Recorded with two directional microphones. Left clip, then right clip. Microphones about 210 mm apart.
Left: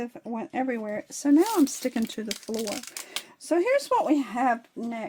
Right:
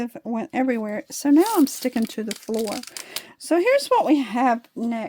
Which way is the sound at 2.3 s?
15° right (ahead or behind).